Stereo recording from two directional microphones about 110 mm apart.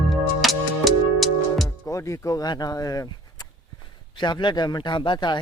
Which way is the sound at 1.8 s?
30° left (ahead or behind).